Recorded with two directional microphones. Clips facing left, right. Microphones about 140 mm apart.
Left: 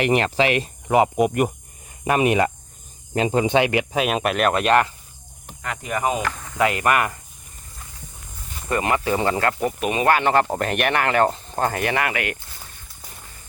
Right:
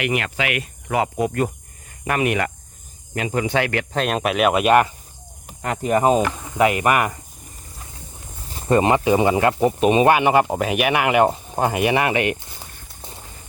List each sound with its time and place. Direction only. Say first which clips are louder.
0.0 s speech: left 4 dB; 35° left (ahead or behind); by 4.9 s 10° right (ahead or behind)
5.6 s speech: right 7 dB; 35° right (ahead or behind)
6.2 s speech: right 3 dB; 15° right (ahead or behind)
8.4 s speech: right 6 dB; 30° right (ahead or behind)